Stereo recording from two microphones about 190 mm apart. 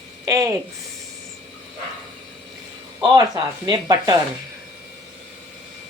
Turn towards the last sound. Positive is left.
turn(degrees=-20)  # may be behind; listen again after turning